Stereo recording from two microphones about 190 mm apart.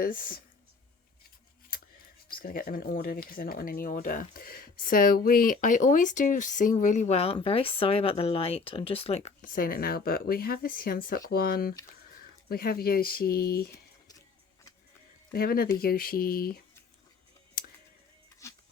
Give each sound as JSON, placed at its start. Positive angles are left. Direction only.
{"t": 0.0, "sound": "speech", "side_deg": 45}
{"t": 2.2, "sound": "speech", "side_deg": 50}
{"t": 15.3, "sound": "speech", "side_deg": 55}
{"t": 17.6, "sound": "music", "side_deg": 50}
{"t": 18.4, "sound": "music", "side_deg": 15}